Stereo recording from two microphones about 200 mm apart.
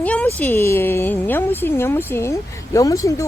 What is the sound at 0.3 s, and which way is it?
A woman's voice, 10° left (ahead or behind).